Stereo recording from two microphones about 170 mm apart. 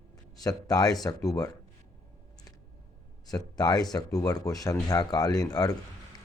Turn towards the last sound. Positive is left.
turn(degrees=20)  # may be behind; listen again after turning